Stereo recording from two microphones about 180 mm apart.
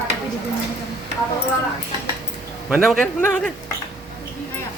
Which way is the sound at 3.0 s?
10° left (ahead or behind).